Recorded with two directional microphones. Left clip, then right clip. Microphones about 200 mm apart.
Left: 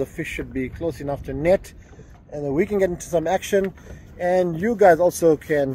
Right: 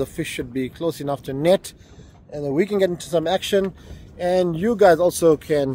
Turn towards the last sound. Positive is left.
turn(degrees=-10)  # may be behind; listen again after turning